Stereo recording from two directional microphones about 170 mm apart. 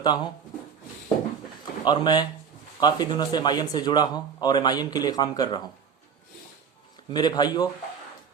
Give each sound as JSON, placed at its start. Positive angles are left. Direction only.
{"t": 0.0, "sound": "speech", "side_deg": 25}
{"t": 1.8, "sound": "speech", "side_deg": 25}
{"t": 7.1, "sound": "speech", "side_deg": 25}